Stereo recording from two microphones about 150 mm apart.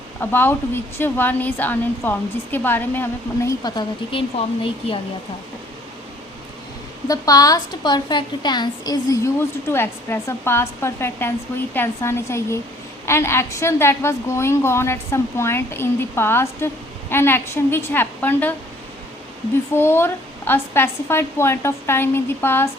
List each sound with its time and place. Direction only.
0.2 s a woman's voice: 15° left (ahead or behind)
3.6 s speech: 30° left (ahead or behind)
7.1 s a woman's voice: 25° left (ahead or behind)
19.7 s a woman's voice: 15° left (ahead or behind)